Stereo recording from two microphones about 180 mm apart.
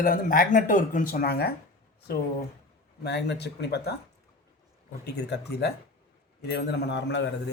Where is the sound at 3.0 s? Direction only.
70° left (ahead or behind).